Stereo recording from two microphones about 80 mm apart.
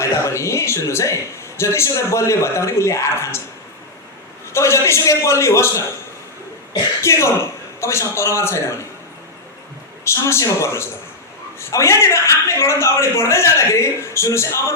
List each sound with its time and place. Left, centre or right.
0.0 s a man's voice: left
4.5 s a man's voice: left
7.0 s a man's voice: left
10.0 s a man's voice: left